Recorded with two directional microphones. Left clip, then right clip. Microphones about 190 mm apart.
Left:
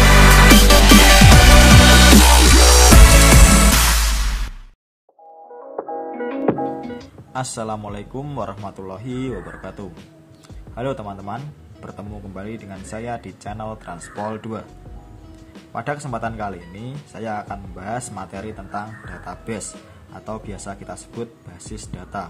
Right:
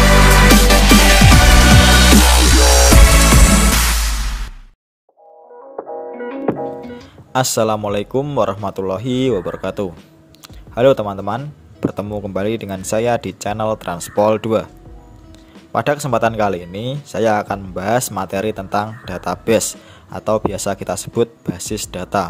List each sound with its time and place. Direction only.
0.0 s music: centre (ahead or behind)
5.8 s music: centre (ahead or behind)
7.3 s a man's voice: 40° right (ahead or behind)
15.7 s speech: 45° right (ahead or behind)